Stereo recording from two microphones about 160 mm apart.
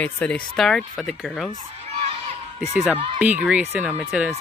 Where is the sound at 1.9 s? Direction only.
40° right (ahead or behind).